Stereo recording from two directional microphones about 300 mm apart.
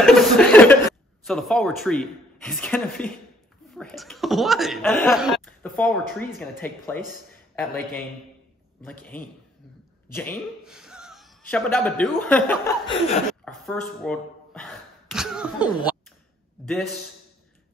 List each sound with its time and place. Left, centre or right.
0.0 s a man's voice: centre
12.8 s a man's voice: centre
13.5 s speech: centre